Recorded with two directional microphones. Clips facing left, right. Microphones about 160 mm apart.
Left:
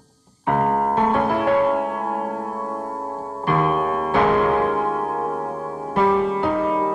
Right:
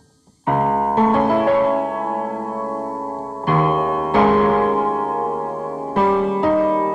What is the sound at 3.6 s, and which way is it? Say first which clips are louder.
Music: right 2 dB; 5° right (ahead or behind).